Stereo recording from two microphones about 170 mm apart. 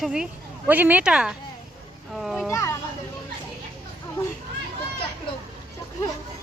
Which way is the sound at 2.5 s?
15° left (ahead or behind).